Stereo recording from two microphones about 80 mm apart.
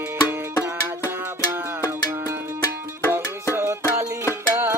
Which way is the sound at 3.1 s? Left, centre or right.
Right.